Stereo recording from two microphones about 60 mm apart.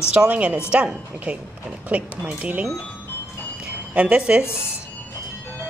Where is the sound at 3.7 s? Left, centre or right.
Right.